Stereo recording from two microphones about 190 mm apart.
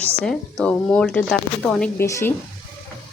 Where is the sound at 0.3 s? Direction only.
5° left (ahead or behind).